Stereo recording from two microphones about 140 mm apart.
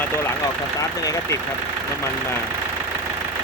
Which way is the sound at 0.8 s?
25° left (ahead or behind).